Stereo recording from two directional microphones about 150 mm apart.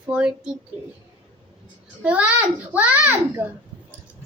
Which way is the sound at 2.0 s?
10° right (ahead or behind).